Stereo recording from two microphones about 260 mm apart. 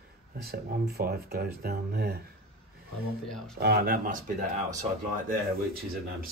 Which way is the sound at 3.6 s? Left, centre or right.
Right.